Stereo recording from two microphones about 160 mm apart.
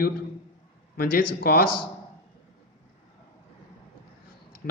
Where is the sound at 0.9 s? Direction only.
70° left (ahead or behind).